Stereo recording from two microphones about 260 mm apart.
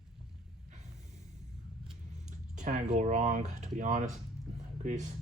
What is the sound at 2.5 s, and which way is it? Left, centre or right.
Speech, right.